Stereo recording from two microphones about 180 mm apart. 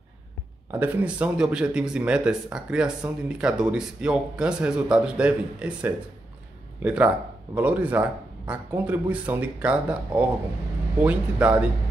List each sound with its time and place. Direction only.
0.7 s speech: 10° right (ahead or behind)